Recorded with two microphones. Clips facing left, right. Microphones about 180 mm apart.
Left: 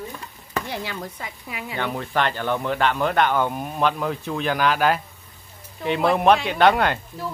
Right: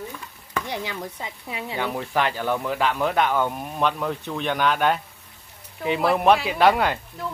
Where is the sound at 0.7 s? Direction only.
20° right (ahead or behind).